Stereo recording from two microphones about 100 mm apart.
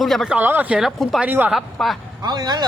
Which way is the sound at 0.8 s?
Centre (ahead or behind).